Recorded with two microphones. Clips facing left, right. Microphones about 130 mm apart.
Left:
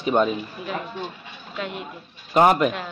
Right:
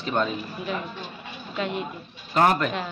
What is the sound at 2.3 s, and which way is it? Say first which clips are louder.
Speech: left 4 dB; 20° left (ahead or behind).